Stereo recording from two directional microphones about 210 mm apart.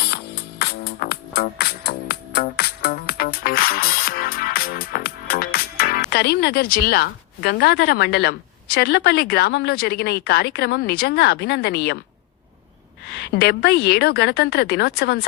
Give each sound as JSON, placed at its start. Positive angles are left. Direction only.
{"t": 0.6, "sound": "music", "side_deg": 50}
{"t": 13.1, "sound": "a woman's voice", "side_deg": 50}